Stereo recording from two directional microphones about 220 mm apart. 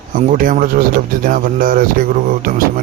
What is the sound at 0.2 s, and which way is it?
Speech, 35° right (ahead or behind).